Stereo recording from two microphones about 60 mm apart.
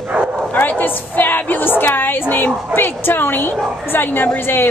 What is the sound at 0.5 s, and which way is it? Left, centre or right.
A woman's voice, left.